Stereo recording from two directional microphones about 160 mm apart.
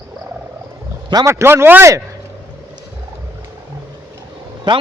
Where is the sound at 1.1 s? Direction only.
20° right (ahead or behind).